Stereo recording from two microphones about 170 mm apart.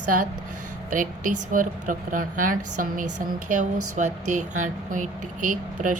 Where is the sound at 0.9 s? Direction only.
50° right (ahead or behind).